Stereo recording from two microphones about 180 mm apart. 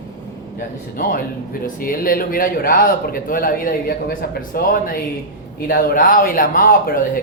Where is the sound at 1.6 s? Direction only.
50° left (ahead or behind).